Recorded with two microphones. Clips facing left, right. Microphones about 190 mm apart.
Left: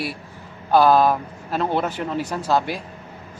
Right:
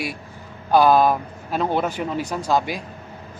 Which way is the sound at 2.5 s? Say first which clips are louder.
Even; 15° right (ahead or behind).